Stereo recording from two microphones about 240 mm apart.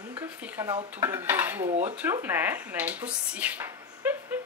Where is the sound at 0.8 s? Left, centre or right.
Centre.